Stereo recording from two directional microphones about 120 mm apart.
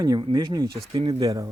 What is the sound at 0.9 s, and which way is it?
Speech, 45° right (ahead or behind).